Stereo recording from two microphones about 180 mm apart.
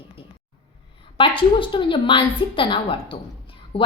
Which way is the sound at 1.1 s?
30° left (ahead or behind).